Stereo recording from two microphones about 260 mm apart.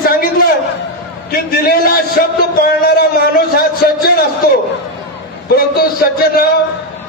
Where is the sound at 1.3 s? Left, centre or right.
Left.